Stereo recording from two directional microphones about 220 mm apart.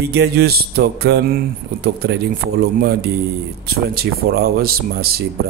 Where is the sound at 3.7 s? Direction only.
45° right (ahead or behind).